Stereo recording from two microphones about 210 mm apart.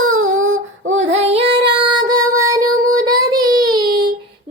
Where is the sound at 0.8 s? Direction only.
65° right (ahead or behind).